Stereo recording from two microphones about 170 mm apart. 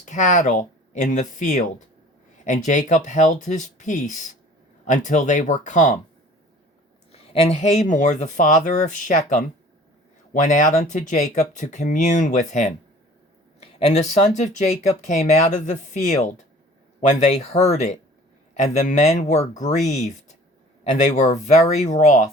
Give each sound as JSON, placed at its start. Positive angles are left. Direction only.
{"t": 0.0, "sound": "speech", "side_deg": 45}
{"t": 7.1, "sound": "speech", "side_deg": 40}